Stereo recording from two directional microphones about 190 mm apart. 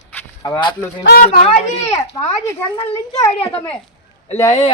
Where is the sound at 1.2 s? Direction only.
40° left (ahead or behind).